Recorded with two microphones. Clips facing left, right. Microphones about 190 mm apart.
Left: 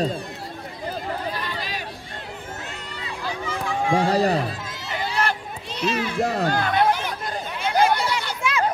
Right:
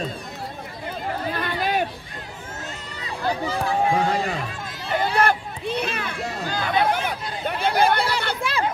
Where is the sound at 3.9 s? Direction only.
35° left (ahead or behind).